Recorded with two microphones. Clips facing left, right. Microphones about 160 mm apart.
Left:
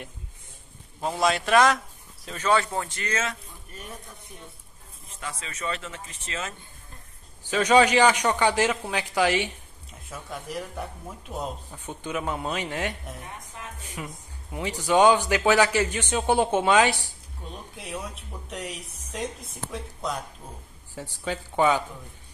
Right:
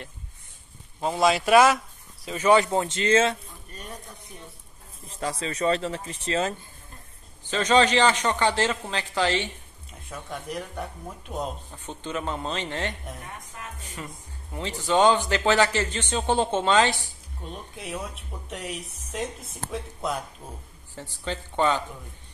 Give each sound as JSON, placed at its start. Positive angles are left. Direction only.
{"t": 1.0, "sound": "speech", "side_deg": 0}
{"t": 3.7, "sound": "speech", "side_deg": 10}
{"t": 5.0, "sound": "speech", "side_deg": -35}
{"t": 7.4, "sound": "speech", "side_deg": 10}
{"t": 11.3, "sound": "speech", "side_deg": 10}
{"t": 17.7, "sound": "speech", "side_deg": 0}
{"t": 20.9, "sound": "speech", "side_deg": 10}